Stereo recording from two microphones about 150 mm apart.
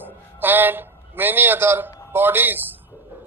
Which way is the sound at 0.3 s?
15° right (ahead or behind).